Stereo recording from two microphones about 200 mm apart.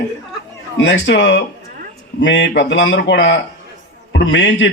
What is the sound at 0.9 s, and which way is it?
A man's voice, 60° left (ahead or behind).